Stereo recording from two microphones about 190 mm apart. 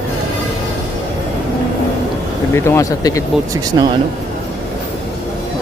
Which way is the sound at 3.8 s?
20° right (ahead or behind).